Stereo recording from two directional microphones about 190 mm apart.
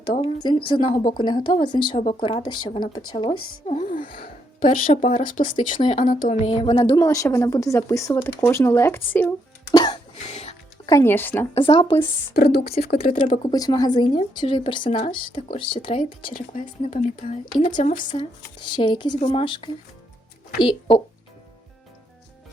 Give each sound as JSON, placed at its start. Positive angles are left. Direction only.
{"t": 0.4, "sound": "a woman's voice", "side_deg": 30}
{"t": 3.7, "sound": "music", "side_deg": 40}
{"t": 4.6, "sound": "speech", "side_deg": 30}
{"t": 5.5, "sound": "speech", "side_deg": 25}
{"t": 9.7, "sound": "cough", "side_deg": 25}
{"t": 10.2, "sound": "music", "side_deg": 35}
{"t": 10.8, "sound": "speech", "side_deg": 15}
{"t": 11.5, "sound": "a woman's voice", "side_deg": 30}
{"t": 12.3, "sound": "a woman's voice", "side_deg": 55}
{"t": 13.0, "sound": "a woman's voice", "side_deg": 30}
{"t": 16.2, "sound": "speech", "side_deg": 45}
{"t": 18.8, "sound": "a woman's voice", "side_deg": 25}